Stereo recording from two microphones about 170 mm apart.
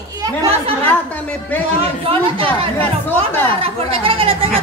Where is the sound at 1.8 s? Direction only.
35° right (ahead or behind).